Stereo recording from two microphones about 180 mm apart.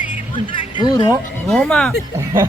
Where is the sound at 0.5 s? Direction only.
25° left (ahead or behind).